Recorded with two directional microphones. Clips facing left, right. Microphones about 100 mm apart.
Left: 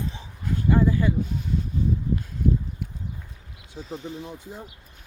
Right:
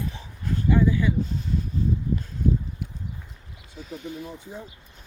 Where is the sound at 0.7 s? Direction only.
40° left (ahead or behind).